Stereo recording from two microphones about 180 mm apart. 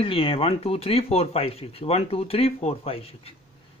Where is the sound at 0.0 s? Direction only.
30° left (ahead or behind).